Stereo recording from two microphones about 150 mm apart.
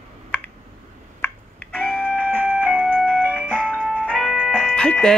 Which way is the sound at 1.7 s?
5° left (ahead or behind).